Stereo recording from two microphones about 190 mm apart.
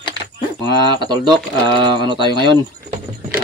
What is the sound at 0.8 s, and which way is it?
Speech, 25° right (ahead or behind).